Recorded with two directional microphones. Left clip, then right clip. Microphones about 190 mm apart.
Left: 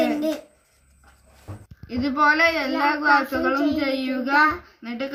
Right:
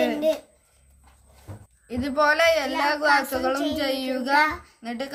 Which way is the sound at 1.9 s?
65° right (ahead or behind).